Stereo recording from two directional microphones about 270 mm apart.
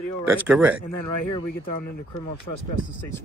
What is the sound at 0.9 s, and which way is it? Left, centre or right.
Speech, left.